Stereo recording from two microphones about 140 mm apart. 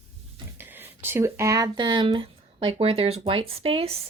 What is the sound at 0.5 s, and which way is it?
Speech, 15° right (ahead or behind).